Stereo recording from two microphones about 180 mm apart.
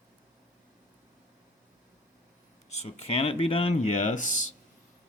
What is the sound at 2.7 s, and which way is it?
Speech, 35° left (ahead or behind).